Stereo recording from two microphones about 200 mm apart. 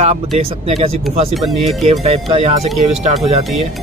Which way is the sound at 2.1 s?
30° right (ahead or behind).